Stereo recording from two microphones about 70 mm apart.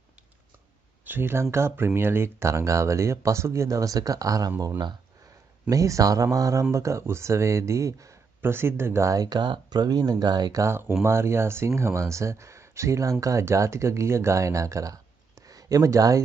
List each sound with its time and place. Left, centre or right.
1.0 s speech: right
4.6 s speech: right
5.7 s speech: right
8.4 s speech: right
9.0 s speech: right
10.6 s speech: right
15.4 s a sound: right